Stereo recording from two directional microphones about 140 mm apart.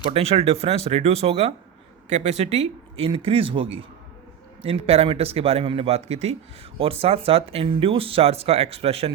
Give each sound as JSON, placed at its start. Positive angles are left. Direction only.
{"t": 0.1, "sound": "speech", "side_deg": -45}
{"t": 2.0, "sound": "speech", "side_deg": -55}